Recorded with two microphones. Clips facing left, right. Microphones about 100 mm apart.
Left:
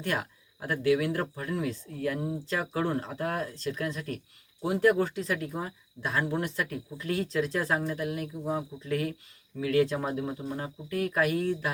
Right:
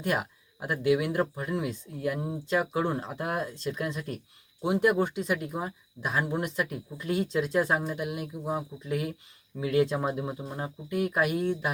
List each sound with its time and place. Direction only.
0.0 s speech: 20° right (ahead or behind)